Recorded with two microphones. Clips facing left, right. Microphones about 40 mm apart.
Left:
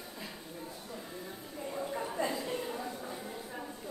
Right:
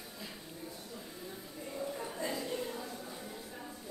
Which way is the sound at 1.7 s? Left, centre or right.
Left.